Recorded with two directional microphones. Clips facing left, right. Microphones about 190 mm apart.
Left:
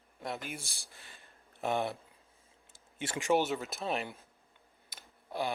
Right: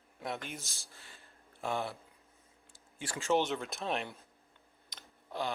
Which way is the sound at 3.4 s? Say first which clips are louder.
Left 1 dB; 5° left (ahead or behind).